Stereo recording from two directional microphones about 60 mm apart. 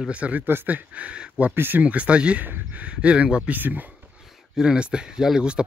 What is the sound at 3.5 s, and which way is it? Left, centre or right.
Speech, right.